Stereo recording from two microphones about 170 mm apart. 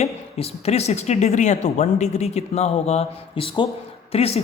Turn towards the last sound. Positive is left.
turn(degrees=35)  # may be behind; listen again after turning